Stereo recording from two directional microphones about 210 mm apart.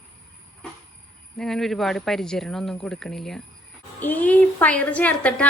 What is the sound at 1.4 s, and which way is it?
A woman's voice, centre (ahead or behind).